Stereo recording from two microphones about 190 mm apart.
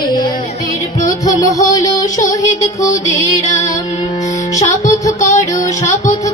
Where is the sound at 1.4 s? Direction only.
15° left (ahead or behind).